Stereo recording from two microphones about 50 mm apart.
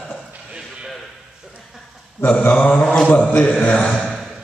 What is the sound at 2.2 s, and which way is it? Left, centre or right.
Speech, left.